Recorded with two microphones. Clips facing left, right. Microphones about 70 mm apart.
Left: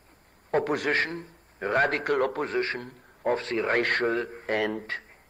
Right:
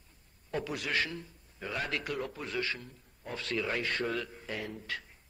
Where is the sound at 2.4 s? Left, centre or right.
Left.